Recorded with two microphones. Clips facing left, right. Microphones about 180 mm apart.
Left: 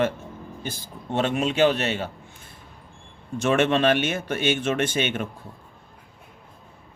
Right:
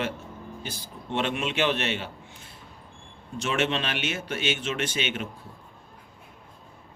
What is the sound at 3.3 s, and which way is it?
Speech, 50° left (ahead or behind).